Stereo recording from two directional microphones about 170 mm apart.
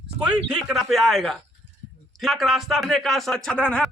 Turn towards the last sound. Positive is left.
turn(degrees=5)  # may be behind; listen again after turning